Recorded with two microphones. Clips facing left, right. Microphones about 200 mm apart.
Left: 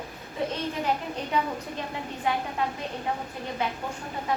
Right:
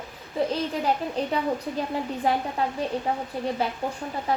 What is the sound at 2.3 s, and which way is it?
Speech, 35° right (ahead or behind).